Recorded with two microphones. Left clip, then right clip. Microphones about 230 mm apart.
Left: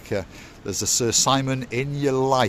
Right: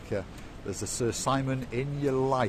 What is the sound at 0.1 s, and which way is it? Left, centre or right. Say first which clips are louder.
Speech: left 6 dB; left.